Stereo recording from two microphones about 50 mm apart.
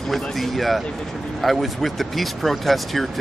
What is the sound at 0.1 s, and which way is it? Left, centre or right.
Speech, centre.